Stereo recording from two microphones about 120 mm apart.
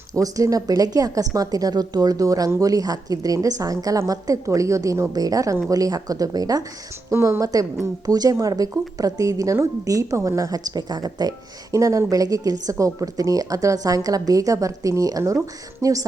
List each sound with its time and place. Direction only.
0.1 s speech: 30° right (ahead or behind)